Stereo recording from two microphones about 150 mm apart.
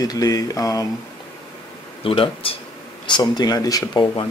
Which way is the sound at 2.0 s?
40° left (ahead or behind).